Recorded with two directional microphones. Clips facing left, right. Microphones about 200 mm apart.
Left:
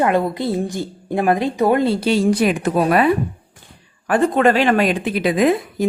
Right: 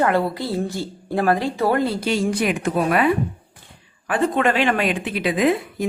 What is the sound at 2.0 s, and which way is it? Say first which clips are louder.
Speech: left 5 dB; 30° left (ahead or behind).